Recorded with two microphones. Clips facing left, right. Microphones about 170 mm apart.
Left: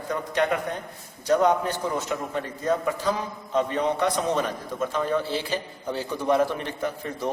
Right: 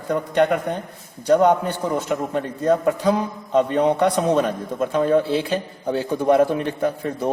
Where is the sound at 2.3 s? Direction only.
60° right (ahead or behind).